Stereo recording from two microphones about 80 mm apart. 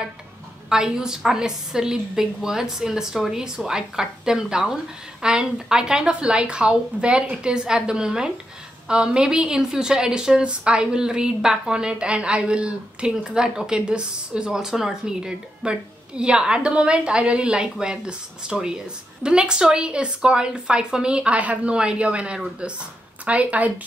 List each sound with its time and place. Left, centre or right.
0.7 s a woman's voice: centre